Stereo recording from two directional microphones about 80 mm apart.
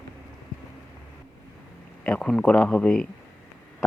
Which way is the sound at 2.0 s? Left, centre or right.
Centre.